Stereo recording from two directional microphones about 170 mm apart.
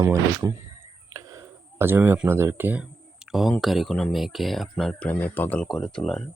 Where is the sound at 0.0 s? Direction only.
20° right (ahead or behind).